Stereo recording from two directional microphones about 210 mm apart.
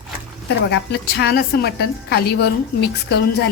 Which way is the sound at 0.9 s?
50° left (ahead or behind).